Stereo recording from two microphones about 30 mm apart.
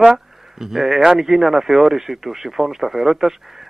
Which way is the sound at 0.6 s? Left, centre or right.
Centre.